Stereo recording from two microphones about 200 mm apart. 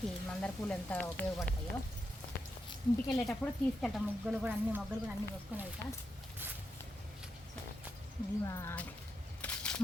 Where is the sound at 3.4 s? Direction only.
5° left (ahead or behind).